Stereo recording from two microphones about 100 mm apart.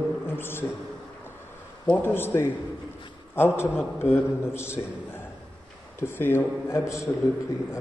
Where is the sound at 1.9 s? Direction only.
20° left (ahead or behind).